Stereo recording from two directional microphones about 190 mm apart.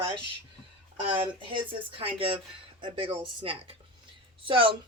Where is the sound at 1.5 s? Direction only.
25° right (ahead or behind).